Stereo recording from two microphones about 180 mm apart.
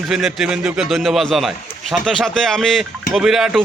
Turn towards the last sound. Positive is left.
turn(degrees=0)  # may be behind; listen again after turning